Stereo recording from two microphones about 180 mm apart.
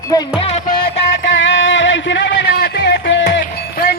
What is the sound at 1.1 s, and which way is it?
Music, 90° left.